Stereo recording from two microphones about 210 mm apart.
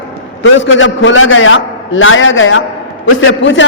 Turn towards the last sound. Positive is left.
turn(degrees=65)  # may be behind; listen again after turning